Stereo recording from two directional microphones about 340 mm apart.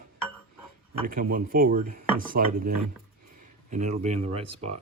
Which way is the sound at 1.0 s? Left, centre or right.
Right.